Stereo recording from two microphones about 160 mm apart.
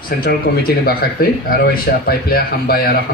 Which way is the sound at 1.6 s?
80° left.